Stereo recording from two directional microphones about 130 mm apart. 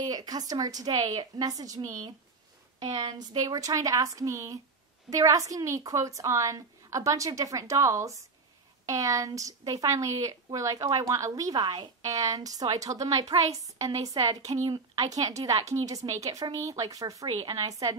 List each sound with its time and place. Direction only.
0.0 s a woman's voice: 30° right (ahead or behind)
2.8 s a woman's voice: 55° right (ahead or behind)
3.1 s a woman's voice: 30° right (ahead or behind)